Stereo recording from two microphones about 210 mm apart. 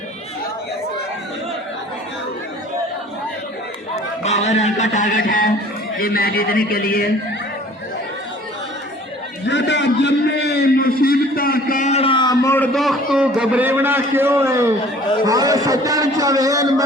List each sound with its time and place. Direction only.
3.9 s a man's voice: 30° left (ahead or behind)
9.5 s a sound: 55° left (ahead or behind); by 14.7 s 15° right (ahead or behind)
15.3 s a man's voice: 15° right (ahead or behind)